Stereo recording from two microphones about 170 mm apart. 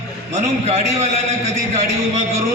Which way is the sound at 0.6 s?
40° right (ahead or behind).